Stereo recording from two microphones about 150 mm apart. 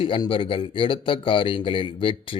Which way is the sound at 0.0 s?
35° left (ahead or behind).